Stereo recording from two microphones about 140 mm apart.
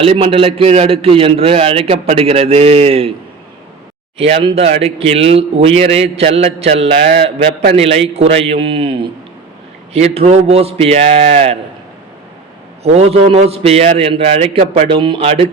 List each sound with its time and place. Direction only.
0.0 s speech: 40° right (ahead or behind)
4.2 s speech: 40° right (ahead or behind)
12.8 s speech: 50° right (ahead or behind)
14.8 s speech: 35° right (ahead or behind)